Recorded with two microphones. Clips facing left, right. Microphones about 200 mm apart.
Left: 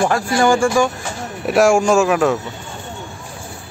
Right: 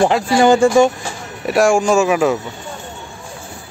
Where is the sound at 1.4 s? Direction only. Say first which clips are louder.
Even; centre (ahead or behind).